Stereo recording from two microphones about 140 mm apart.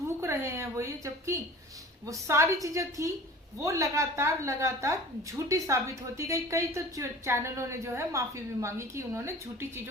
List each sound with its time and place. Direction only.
0.2 s a woman's voice: 20° right (ahead or behind)